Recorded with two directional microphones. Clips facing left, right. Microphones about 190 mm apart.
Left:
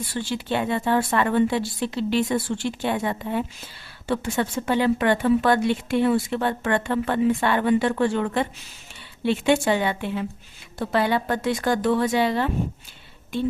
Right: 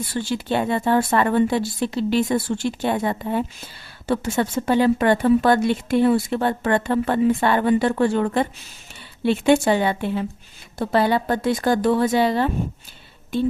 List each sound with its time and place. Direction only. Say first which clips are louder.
0.1 s a woman's voice: right 3 dB; 40° right (ahead or behind)